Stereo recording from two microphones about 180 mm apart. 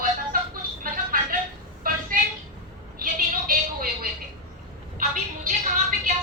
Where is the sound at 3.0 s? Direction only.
55° right (ahead or behind).